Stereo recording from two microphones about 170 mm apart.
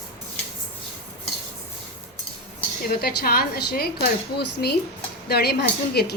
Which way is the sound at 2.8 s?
65° left (ahead or behind).